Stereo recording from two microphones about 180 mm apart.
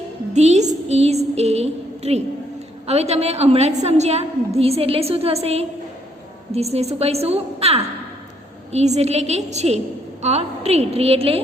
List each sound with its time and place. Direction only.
0.3 s a woman's voice: 40° right (ahead or behind)
0.9 s a sound: 35° right (ahead or behind)
2.8 s a woman's voice: 35° right (ahead or behind)